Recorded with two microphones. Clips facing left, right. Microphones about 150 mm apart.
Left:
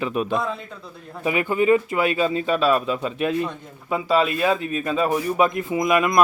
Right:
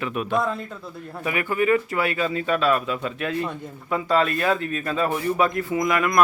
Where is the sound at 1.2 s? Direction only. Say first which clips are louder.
Left 3 dB; 20° left (ahead or behind).